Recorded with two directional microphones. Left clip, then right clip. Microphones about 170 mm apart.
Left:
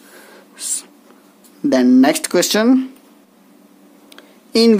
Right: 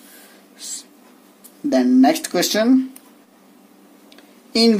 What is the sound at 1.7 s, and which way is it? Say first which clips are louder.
Speech: left 2 dB; 45° left (ahead or behind).